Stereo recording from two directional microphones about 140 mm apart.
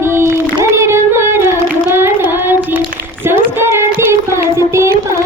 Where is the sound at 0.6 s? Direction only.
20° right (ahead or behind).